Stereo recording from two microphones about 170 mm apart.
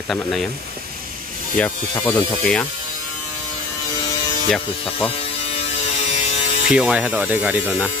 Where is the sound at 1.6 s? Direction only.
5° left (ahead or behind).